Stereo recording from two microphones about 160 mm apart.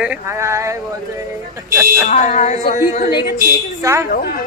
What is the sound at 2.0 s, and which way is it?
Speech, 50° left (ahead or behind).